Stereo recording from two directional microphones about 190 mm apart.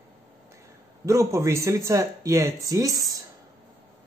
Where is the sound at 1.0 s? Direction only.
15° right (ahead or behind).